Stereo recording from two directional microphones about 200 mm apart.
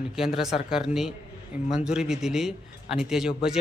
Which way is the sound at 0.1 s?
Centre (ahead or behind).